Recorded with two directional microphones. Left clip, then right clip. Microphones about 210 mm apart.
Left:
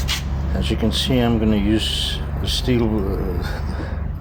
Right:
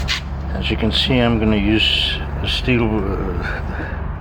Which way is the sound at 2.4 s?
25° right (ahead or behind).